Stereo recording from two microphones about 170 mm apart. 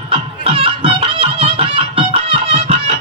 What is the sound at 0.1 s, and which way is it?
Music, 35° right (ahead or behind).